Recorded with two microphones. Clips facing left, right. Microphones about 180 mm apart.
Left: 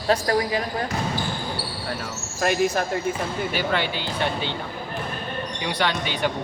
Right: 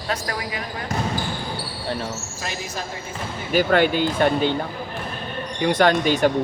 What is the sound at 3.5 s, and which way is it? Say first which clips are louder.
Speech: right 11 dB; 45° right (ahead or behind).